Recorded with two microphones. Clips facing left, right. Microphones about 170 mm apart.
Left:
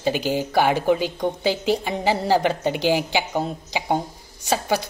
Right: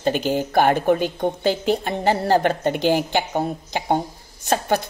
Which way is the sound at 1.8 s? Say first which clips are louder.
Right 2 dB; 10° left (ahead or behind).